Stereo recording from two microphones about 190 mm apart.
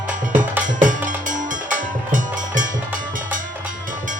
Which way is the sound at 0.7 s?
45° right (ahead or behind).